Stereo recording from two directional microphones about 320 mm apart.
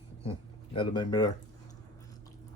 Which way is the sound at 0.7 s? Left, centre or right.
Centre.